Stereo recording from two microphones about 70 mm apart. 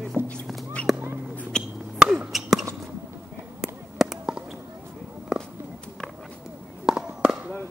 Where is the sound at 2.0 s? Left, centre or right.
Centre.